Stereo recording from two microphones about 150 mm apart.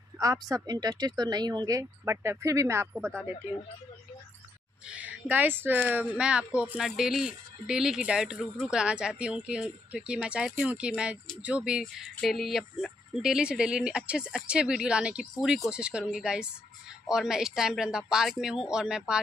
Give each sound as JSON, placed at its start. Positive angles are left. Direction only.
{"t": 0.2, "sound": "speech", "side_deg": -25}
{"t": 4.8, "sound": "speech", "side_deg": -10}